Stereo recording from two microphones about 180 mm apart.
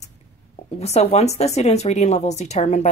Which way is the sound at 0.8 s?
35° left (ahead or behind).